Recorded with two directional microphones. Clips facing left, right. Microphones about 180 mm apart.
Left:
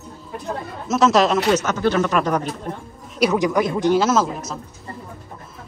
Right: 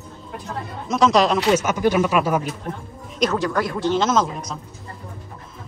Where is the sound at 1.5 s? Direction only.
10° right (ahead or behind).